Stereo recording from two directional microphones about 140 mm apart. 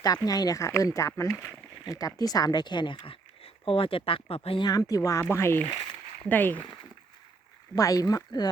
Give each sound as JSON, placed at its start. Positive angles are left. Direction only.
{"t": 0.3, "sound": "speech", "side_deg": 25}
{"t": 4.7, "sound": "speech", "side_deg": 25}
{"t": 7.8, "sound": "speech", "side_deg": 25}